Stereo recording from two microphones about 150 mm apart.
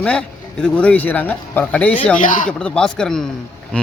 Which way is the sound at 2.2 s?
60° left (ahead or behind).